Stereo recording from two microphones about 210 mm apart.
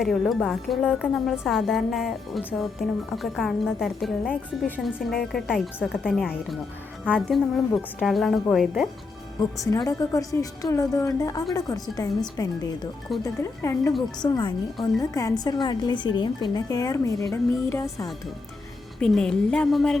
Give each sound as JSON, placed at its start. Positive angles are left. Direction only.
{"t": 0.0, "sound": "a woman's voice", "side_deg": 0}
{"t": 9.6, "sound": "a woman's voice", "side_deg": 15}
{"t": 18.9, "sound": "a woman's voice", "side_deg": 5}